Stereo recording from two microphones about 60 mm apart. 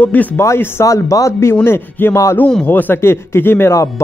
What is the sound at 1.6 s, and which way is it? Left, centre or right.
Speech, left.